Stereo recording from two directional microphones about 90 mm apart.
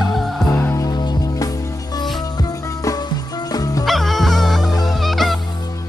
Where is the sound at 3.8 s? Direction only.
Centre (ahead or behind).